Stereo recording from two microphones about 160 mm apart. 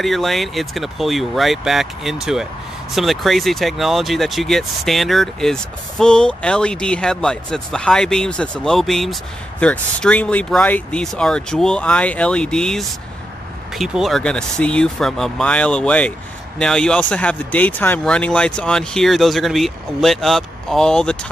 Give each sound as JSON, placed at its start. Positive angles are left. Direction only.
{"t": 0.0, "sound": "speech", "side_deg": 0}